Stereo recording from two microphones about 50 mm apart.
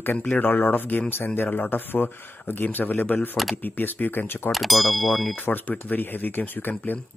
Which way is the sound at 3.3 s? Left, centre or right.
Centre.